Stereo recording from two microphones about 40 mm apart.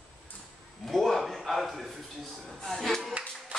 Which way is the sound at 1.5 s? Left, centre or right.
Centre.